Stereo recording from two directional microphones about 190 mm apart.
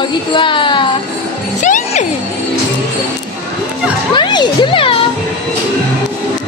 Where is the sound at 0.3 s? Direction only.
25° left (ahead or behind).